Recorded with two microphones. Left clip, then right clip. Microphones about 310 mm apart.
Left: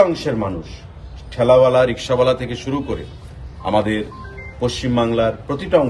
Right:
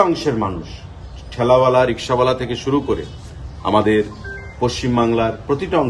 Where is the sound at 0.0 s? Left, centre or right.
Centre.